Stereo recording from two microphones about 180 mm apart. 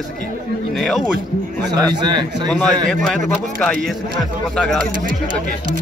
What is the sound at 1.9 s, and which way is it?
Speech, 25° right (ahead or behind).